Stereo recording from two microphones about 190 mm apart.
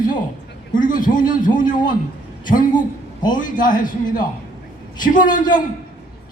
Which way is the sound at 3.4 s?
45° left (ahead or behind).